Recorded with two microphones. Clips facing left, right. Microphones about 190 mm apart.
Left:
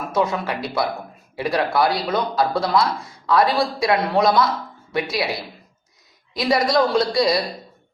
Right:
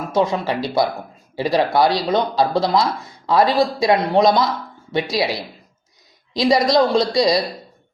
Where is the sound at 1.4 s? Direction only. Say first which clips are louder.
Right 3 dB; 30° right (ahead or behind).